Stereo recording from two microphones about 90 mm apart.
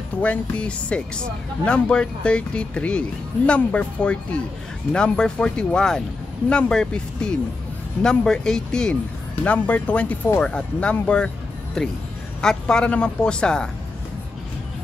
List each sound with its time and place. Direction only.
0.2 s speech: 15° left (ahead or behind)